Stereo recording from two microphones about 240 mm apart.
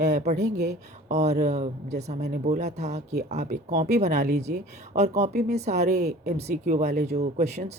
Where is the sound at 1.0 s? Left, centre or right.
Right.